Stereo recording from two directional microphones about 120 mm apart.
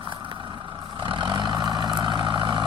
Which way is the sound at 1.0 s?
40° right (ahead or behind).